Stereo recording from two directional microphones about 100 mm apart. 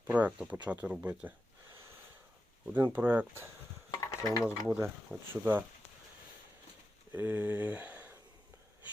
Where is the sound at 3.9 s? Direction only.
35° left (ahead or behind).